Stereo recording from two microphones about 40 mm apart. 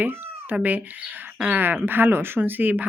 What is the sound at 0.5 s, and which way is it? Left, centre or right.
Speech, right.